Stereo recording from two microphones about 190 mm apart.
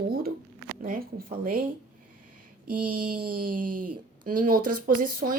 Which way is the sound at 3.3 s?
50° right (ahead or behind).